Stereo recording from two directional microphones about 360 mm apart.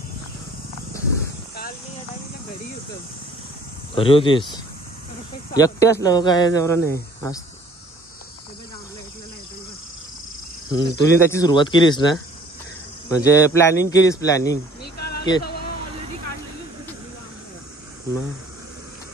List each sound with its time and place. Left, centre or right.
3.9 s speech: centre
5.5 s speech: centre
10.7 s speech: centre
15.0 s a sound: left